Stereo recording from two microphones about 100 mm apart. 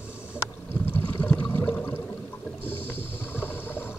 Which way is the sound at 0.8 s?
15° left (ahead or behind).